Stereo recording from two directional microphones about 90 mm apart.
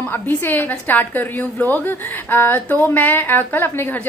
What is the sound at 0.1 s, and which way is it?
A woman's voice, 20° left (ahead or behind).